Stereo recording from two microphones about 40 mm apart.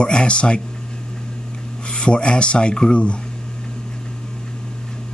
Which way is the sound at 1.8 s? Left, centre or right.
Left.